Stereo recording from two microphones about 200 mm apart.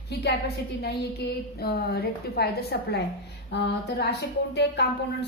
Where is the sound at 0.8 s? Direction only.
55° left (ahead or behind).